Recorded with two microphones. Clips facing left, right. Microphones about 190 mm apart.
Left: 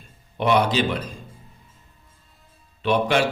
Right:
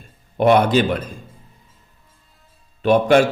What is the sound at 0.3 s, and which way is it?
Speech, 50° right (ahead or behind).